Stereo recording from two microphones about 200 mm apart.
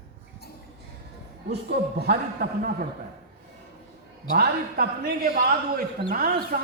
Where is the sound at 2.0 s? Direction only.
55° right (ahead or behind).